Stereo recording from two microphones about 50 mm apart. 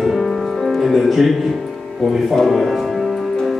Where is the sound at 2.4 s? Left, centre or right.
Centre.